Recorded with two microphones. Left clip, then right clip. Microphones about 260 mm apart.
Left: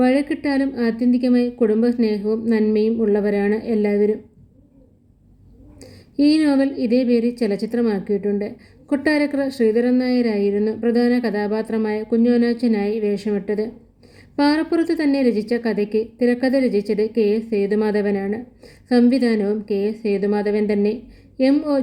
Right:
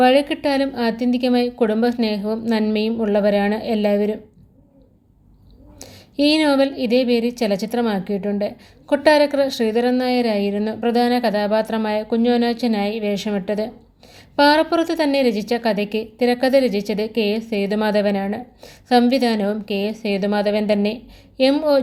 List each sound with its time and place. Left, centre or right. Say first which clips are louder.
0.0 s a woman's voice: right 4 dB; right
5.8 s a sound: even; right
6.7 s a woman's voice: right 1 dB; right